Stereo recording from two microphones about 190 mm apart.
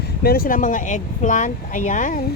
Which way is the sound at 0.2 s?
50° left (ahead or behind).